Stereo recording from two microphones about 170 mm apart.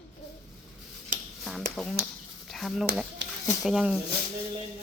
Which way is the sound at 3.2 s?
90° right.